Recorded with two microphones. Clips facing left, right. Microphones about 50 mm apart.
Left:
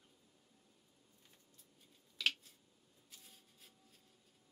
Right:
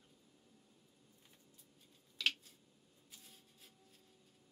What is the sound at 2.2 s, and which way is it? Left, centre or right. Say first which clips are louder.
Scissors: even; centre.